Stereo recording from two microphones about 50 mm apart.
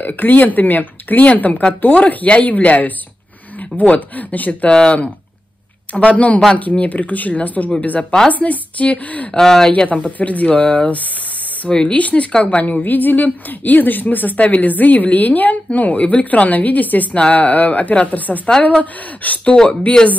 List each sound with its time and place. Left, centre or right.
0.0 s a woman's voice: left
5.9 s a woman's voice: left
9.3 s speech: centre
9.8 s a woman's voice: left
19.5 s speech: centre